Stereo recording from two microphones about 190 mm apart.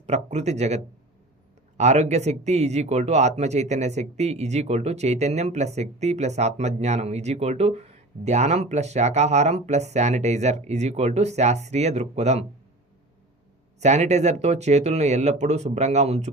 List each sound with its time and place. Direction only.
0.0 s speech: 35° right (ahead or behind)
1.8 s speech: 35° right (ahead or behind)
13.7 s speech: 35° right (ahead or behind)